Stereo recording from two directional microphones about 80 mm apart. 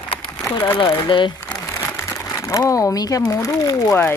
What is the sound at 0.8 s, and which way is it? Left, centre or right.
Speech, left.